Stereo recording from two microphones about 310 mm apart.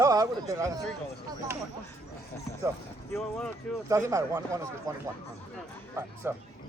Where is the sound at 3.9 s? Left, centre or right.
Centre.